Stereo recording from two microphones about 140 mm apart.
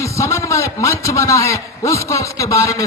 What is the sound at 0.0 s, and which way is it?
A man's voice, 20° left (ahead or behind).